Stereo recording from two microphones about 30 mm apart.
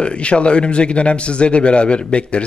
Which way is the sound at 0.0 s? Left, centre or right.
Left.